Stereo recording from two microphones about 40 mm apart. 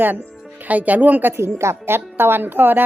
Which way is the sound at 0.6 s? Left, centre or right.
Right.